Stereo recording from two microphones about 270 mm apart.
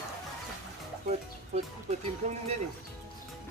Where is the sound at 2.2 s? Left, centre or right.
Right.